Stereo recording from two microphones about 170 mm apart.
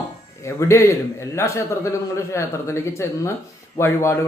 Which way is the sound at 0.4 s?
15° left (ahead or behind).